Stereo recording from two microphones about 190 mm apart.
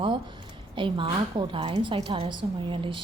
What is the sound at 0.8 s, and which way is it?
A woman's voice, 25° right (ahead or behind).